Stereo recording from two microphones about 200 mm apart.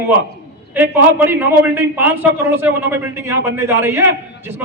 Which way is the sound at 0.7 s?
10° right (ahead or behind).